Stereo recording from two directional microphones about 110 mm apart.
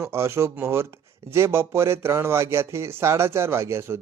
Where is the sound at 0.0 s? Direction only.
25° right (ahead or behind).